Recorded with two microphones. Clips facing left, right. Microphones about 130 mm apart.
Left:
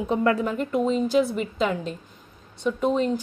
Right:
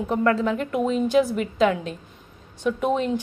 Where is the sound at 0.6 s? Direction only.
5° right (ahead or behind).